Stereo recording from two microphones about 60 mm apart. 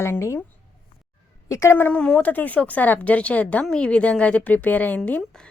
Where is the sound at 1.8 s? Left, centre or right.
Centre.